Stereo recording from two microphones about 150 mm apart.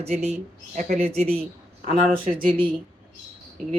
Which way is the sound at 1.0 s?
45° right (ahead or behind).